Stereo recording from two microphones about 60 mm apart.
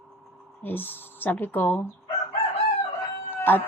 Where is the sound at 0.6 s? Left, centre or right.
Left.